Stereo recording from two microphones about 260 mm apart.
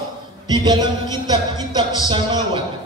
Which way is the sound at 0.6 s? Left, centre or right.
Centre.